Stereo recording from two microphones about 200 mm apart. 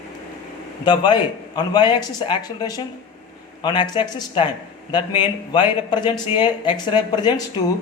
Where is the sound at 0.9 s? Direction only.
20° left (ahead or behind).